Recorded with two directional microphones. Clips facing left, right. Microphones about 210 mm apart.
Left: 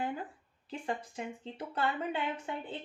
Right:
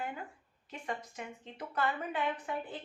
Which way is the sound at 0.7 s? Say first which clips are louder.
Left 3 dB; 30° left (ahead or behind).